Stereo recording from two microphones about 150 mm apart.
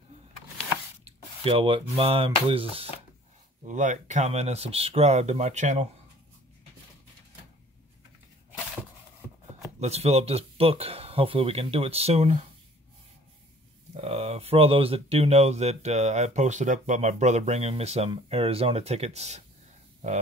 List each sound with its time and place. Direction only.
1.0 s speech: 40° right (ahead or behind)
3.6 s speech: 55° right (ahead or behind)
9.8 s speech: 45° right (ahead or behind)
13.9 s speech: 45° right (ahead or behind)